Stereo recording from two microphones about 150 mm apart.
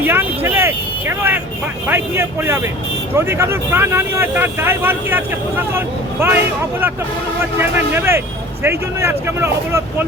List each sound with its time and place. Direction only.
0.0 s speech: 15° right (ahead or behind)